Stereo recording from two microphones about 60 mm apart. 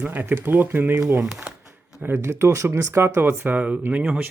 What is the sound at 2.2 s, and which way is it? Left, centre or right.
Speech, right.